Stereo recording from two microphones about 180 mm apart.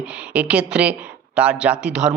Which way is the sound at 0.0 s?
5° right (ahead or behind).